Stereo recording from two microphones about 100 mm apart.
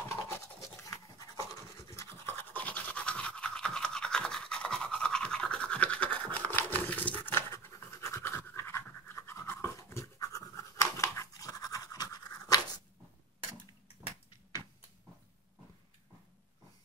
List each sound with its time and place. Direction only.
0.1 s scratch: 35° left (ahead or behind)